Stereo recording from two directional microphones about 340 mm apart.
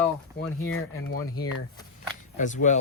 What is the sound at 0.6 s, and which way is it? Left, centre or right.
Speech, left.